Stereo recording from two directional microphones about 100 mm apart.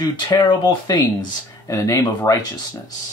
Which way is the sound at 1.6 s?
30° left (ahead or behind).